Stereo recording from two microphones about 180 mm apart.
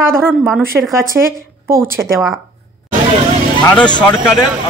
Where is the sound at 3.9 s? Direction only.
25° left (ahead or behind).